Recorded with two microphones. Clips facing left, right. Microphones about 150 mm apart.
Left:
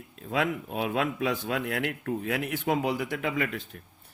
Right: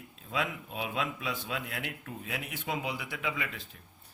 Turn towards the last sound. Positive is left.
turn(degrees=50)  # may be behind; listen again after turning